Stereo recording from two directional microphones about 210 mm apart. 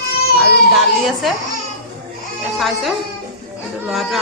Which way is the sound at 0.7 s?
Centre (ahead or behind).